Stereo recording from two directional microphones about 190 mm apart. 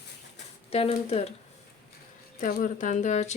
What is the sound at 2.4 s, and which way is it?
Speech, 45° left (ahead or behind).